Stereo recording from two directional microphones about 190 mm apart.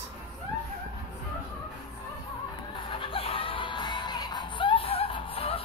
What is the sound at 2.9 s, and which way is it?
Music, 30° left (ahead or behind).